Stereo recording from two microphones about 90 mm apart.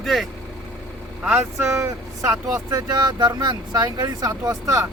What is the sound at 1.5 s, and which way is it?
Speech, 30° right (ahead or behind).